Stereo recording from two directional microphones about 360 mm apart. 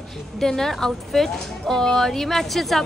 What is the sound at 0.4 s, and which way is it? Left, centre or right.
A woman's voice, centre.